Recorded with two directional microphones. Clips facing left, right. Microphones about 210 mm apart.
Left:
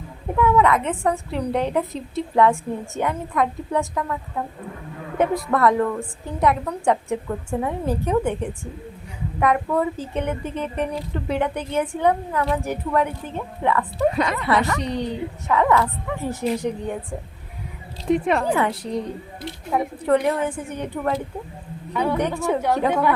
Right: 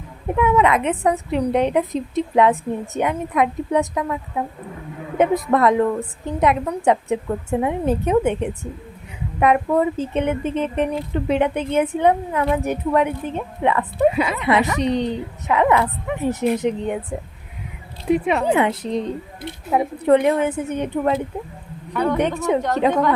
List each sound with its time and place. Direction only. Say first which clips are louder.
0.3 s a woman's voice: right 1 dB; 20° right (ahead or behind)
14.1 s speech: right 1 dB; 5° right (ahead or behind)
14.3 s a woman's voice: right 3 dB; 20° right (ahead or behind)
18.1 s speech: right 1 dB; 5° right (ahead or behind)
18.4 s a woman's voice: right 3 dB; 20° right (ahead or behind)
21.9 s a woman's voice: right 2 dB; 10° left (ahead or behind)
22.4 s a woman's voice: right 3 dB; 20° right (ahead or behind)
22.9 s a woman's voice: right 3 dB; 10° left (ahead or behind)